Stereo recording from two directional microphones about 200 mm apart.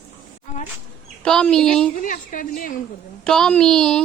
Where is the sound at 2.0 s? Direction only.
40° left (ahead or behind).